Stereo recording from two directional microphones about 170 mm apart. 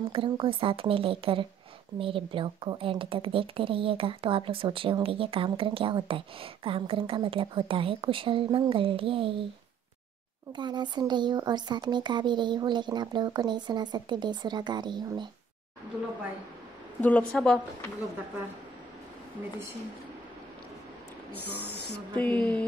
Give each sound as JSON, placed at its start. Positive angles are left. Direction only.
{"t": 0.1, "sound": "a woman's voice", "side_deg": -30}
{"t": 10.5, "sound": "speech", "side_deg": -25}
{"t": 17.0, "sound": "a woman's voice", "side_deg": 5}
{"t": 21.3, "sound": "speech", "side_deg": -10}
{"t": 22.1, "sound": "speech", "side_deg": 10}